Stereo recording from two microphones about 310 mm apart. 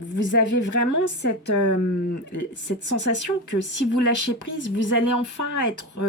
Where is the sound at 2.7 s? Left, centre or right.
Left.